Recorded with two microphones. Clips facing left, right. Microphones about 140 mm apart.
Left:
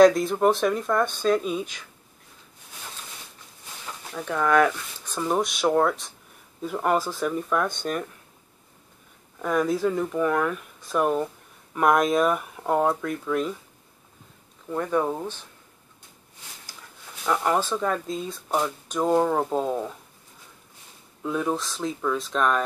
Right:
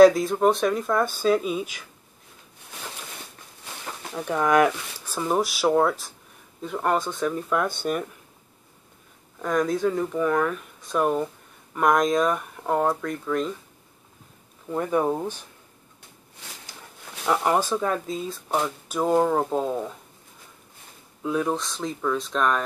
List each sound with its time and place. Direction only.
0.0 s speech: centre (ahead or behind)
3.7 s a sound: 70° right (ahead or behind)
4.1 s speech: 15° right (ahead or behind)
9.4 s speech: 5° left (ahead or behind)
14.7 s speech: 10° right (ahead or behind)
17.3 s speech: 15° right (ahead or behind)
21.2 s speech: centre (ahead or behind)